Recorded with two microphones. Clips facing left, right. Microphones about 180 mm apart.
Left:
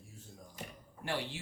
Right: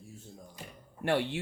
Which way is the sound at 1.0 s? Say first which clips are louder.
Right 9 dB; 60° right (ahead or behind).